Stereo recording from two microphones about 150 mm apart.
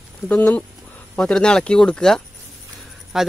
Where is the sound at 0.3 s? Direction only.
10° left (ahead or behind).